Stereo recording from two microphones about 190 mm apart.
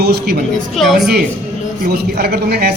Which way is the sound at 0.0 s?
55° right (ahead or behind).